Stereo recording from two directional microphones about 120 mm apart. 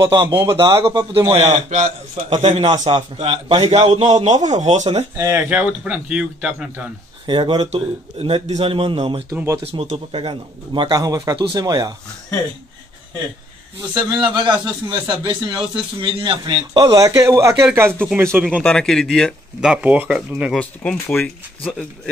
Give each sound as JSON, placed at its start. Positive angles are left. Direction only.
{"t": 0.5, "sound": "a man's voice", "side_deg": -25}
{"t": 1.2, "sound": "a man's voice", "side_deg": -55}
{"t": 2.2, "sound": "a man's voice", "side_deg": -55}
{"t": 5.1, "sound": "a man's voice", "side_deg": -25}
{"t": 5.5, "sound": "speech", "side_deg": -10}
{"t": 7.2, "sound": "a man's voice", "side_deg": -45}
{"t": 7.7, "sound": "a man's voice", "side_deg": -60}
{"t": 13.9, "sound": "a man's voice", "side_deg": -35}
{"t": 16.9, "sound": "a man's voice", "side_deg": -30}
{"t": 18.6, "sound": "speech", "side_deg": 5}
{"t": 20.5, "sound": "speech", "side_deg": 10}